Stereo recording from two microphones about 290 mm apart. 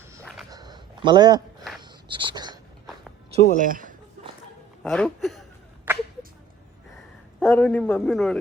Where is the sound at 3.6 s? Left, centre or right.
Right.